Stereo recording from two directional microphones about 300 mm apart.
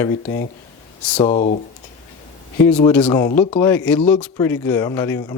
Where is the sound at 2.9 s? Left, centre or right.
Centre.